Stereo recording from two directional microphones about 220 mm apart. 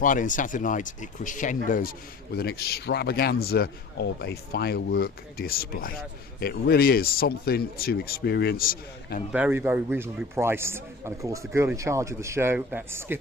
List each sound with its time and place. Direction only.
0.0 s speech: 35° left (ahead or behind)
9.3 s a man's voice: 10° right (ahead or behind)